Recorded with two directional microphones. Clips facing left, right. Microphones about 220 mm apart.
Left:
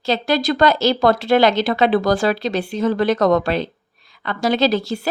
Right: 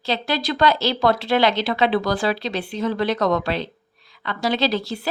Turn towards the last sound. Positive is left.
turn(degrees=45)  # may be behind; listen again after turning